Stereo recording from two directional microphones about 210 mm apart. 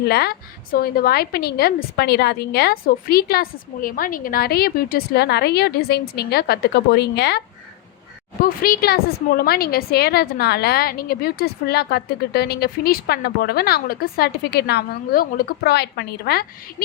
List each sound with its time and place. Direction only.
0.0 s a woman's voice: 50° left (ahead or behind)